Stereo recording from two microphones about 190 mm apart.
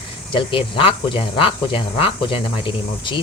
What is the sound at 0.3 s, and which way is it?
Speech, 30° left (ahead or behind).